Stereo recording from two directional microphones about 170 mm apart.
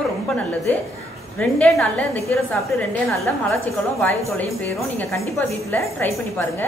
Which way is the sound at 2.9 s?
Centre (ahead or behind).